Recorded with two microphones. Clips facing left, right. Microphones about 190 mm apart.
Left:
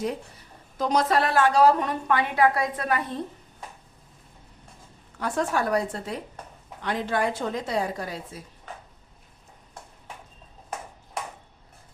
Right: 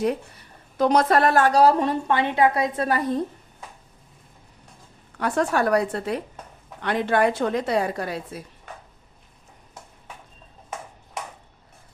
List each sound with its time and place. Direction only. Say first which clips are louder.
0.8 s a woman's voice: right 4 dB; 60° right (ahead or behind); by 3.0 s 30° right (ahead or behind)
5.2 s a woman's voice: right 4 dB; 65° right (ahead or behind)